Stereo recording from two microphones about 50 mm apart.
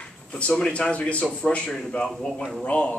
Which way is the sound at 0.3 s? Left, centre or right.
Centre.